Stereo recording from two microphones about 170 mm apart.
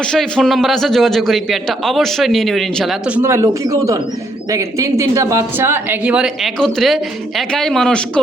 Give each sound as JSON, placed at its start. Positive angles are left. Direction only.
{"t": 0.0, "sound": "speech", "side_deg": 5}
{"t": 3.2, "sound": "speech", "side_deg": -15}